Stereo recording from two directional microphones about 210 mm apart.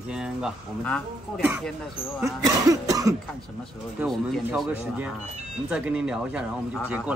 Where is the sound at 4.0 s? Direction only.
5° right (ahead or behind).